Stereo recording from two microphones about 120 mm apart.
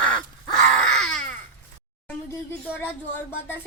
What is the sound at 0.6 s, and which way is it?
Baby cry, 5° left (ahead or behind).